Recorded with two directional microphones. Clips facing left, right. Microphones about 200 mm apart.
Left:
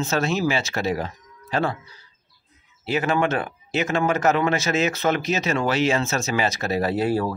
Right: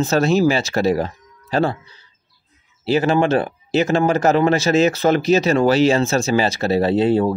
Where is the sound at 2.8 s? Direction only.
30° right (ahead or behind).